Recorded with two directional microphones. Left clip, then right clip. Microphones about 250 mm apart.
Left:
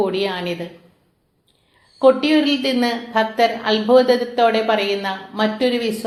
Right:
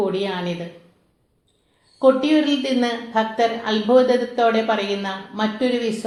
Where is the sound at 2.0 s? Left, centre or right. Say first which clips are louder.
Left 2 dB; left.